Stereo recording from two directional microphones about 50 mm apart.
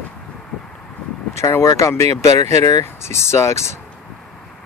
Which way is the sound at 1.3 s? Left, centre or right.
Left.